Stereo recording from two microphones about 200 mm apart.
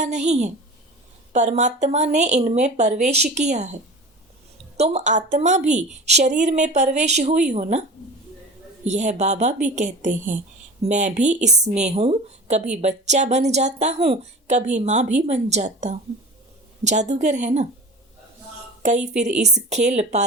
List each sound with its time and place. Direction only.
0.0 s a woman's voice: 35° right (ahead or behind)
4.8 s a woman's voice: 35° right (ahead or behind)
18.8 s a woman's voice: 35° right (ahead or behind)